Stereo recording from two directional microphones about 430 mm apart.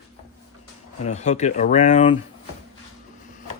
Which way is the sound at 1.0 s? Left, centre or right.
Centre.